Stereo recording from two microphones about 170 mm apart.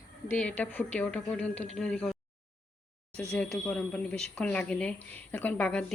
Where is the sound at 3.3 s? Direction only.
5° left (ahead or behind).